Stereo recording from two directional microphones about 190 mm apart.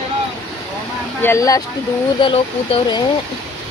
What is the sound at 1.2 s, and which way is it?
Speech, 15° left (ahead or behind).